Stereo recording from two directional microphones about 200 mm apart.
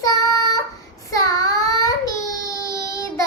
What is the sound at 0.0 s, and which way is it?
Child singing, 15° left (ahead or behind).